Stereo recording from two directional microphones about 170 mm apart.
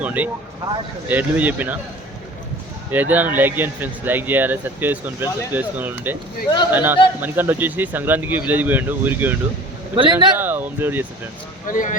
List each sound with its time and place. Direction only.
0.0 s speech: 10° right (ahead or behind)
2.9 s speech: 10° right (ahead or behind)
9.9 s a man's voice: 30° right (ahead or behind)
10.3 s speech: 10° right (ahead or behind)
11.7 s speech: 50° left (ahead or behind)